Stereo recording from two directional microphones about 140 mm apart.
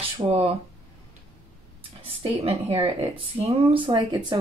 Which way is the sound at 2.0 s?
45° right (ahead or behind).